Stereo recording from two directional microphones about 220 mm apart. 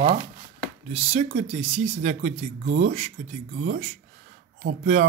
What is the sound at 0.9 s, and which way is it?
Speech, 30° right (ahead or behind).